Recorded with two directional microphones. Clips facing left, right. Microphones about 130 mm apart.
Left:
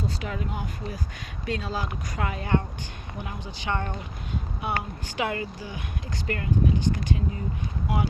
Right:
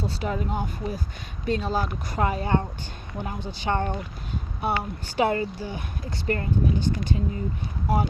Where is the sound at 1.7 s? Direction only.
35° right (ahead or behind).